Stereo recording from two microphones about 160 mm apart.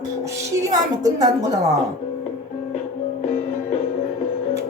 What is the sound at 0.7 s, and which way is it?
Speech, 25° right (ahead or behind).